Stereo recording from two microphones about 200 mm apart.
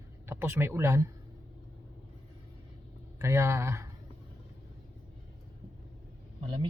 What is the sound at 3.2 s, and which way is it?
Speech, 15° right (ahead or behind).